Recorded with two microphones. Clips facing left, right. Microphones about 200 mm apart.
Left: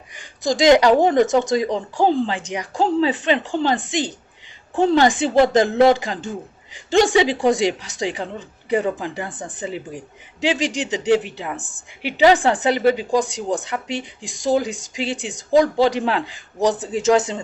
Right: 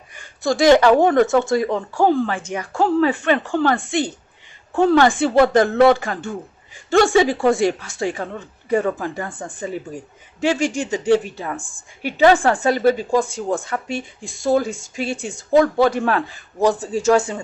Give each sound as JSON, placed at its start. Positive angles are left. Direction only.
{"t": 0.1, "sound": "a woman's voice", "side_deg": 15}